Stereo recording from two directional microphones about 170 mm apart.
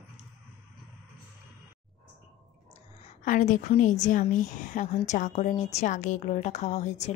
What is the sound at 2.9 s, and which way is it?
A woman's voice, 45° left (ahead or behind).